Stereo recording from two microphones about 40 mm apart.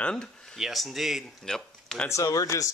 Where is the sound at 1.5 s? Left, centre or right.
Centre.